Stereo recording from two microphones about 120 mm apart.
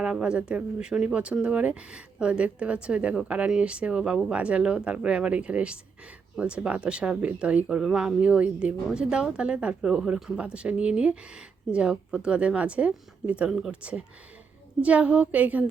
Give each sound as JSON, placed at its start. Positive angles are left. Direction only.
{"t": 0.0, "sound": "speech", "side_deg": -5}